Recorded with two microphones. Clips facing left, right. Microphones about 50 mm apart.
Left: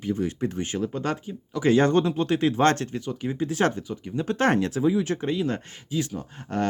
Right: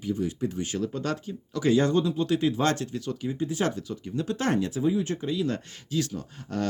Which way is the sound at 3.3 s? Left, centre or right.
Left.